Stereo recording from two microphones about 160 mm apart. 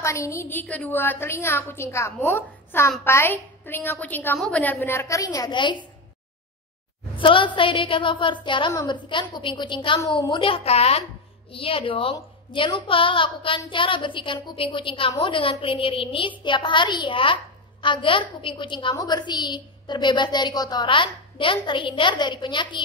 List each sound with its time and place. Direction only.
0.0 s a woman's voice: 20° left (ahead or behind)
7.2 s a woman's voice: 30° left (ahead or behind)